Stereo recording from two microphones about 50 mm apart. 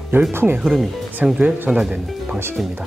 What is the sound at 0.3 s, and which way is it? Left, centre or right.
Speech, right.